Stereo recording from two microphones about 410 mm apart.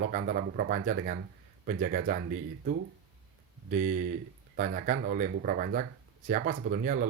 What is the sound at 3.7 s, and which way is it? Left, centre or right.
Speech, centre.